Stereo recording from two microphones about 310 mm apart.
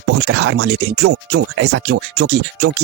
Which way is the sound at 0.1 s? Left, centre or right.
Right.